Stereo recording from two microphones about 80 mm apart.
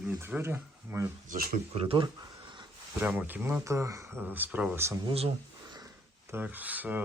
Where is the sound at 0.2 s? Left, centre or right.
Right.